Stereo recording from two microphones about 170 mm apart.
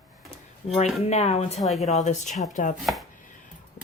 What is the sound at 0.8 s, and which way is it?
Speech, 40° left (ahead or behind).